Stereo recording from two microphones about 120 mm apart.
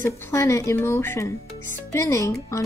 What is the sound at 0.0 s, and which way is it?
Speech, 25° left (ahead or behind).